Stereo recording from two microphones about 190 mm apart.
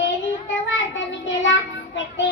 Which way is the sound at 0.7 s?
75° left (ahead or behind).